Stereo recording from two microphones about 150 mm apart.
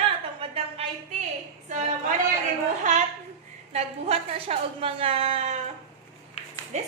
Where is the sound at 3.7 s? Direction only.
45° right (ahead or behind).